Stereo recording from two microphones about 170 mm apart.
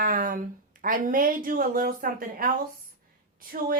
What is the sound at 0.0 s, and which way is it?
A woman's voice, 50° right (ahead or behind).